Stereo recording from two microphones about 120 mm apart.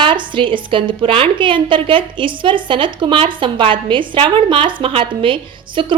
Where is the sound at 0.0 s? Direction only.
45° right (ahead or behind).